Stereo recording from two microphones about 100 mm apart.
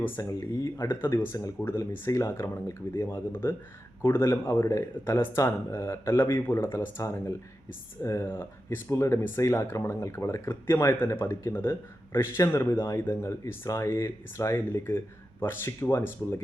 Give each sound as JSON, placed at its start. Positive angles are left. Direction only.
{"t": 0.2, "sound": "speech", "side_deg": 35}